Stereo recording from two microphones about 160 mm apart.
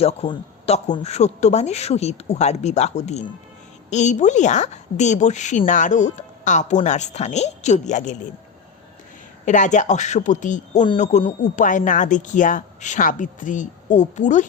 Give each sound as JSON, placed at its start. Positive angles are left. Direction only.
{"t": 0.0, "sound": "a man's voice", "side_deg": 40}
{"t": 9.5, "sound": "a woman's voice", "side_deg": 50}